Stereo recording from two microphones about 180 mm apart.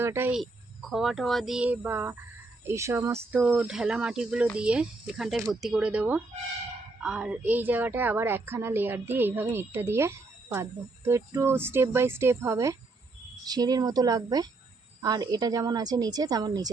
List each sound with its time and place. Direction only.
0.0 s a woman's voice: 15° right (ahead or behind)
0.9 s a woman's voice: centre (ahead or behind); by 16.6 s 20° right (ahead or behind)